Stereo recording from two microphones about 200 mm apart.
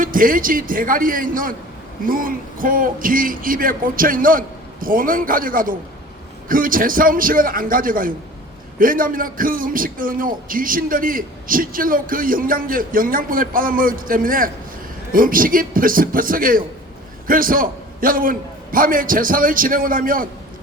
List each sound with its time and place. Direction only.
0.0 s speech: 45° right (ahead or behind)